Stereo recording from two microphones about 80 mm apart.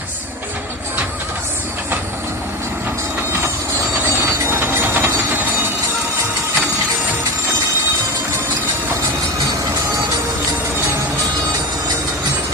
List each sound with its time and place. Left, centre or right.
4.0 s ratchet: right